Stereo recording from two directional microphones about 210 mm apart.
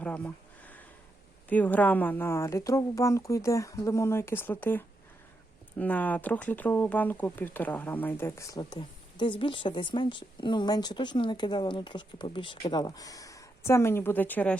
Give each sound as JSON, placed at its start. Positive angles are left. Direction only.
{"t": 0.0, "sound": "a sound", "side_deg": 5}
{"t": 1.5, "sound": "speech", "side_deg": 5}
{"t": 5.8, "sound": "speech", "side_deg": 5}